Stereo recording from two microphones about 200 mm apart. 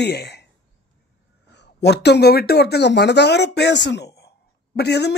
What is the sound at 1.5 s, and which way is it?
A man's voice, 60° left (ahead or behind).